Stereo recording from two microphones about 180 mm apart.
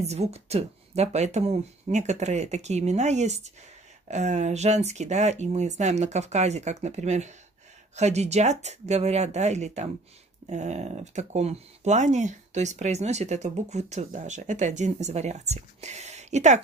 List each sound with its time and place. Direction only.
0.0 s speech: 35° right (ahead or behind)